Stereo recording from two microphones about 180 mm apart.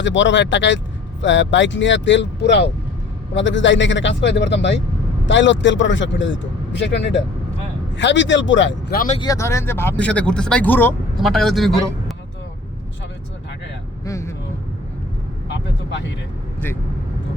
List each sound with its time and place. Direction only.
0.0 s speech: 90° left; by 2.7 s 75° left (ahead or behind)
3.3 s speech: 90° left
5.2 s speech: 90° left
6.7 s speech: 80° left
8.9 s speech: 50° left (ahead or behind)
9.1 s a man's voice: 20° left (ahead or behind); by 12.1 s centre (ahead or behind)
14.0 s vehicle: 15° left (ahead or behind)
15.4 s vehicle: 80° left